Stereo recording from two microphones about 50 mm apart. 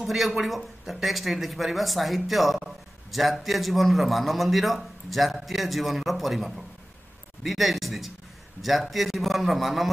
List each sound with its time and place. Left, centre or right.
0.0 s speech: centre